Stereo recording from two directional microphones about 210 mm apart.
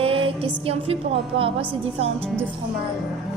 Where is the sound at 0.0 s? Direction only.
25° right (ahead or behind).